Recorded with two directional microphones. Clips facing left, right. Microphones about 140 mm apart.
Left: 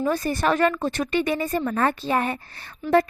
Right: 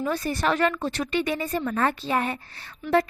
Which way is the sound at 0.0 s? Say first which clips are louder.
Left 3 dB; 45° left (ahead or behind).